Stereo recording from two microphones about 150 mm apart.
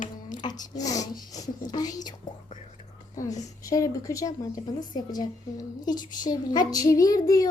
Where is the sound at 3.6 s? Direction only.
20° left (ahead or behind).